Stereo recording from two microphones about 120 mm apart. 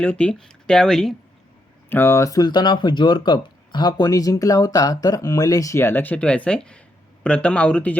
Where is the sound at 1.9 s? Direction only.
20° left (ahead or behind).